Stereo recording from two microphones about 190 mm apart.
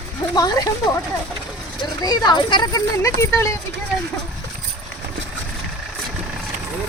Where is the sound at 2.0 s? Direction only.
20° left (ahead or behind).